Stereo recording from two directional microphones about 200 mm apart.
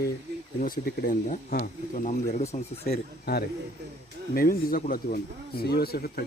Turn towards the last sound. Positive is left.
turn(degrees=50)  # may be behind; listen again after turning